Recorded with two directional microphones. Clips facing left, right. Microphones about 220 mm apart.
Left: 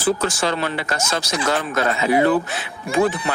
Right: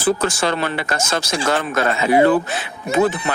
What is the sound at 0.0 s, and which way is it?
Speech, 55° right (ahead or behind).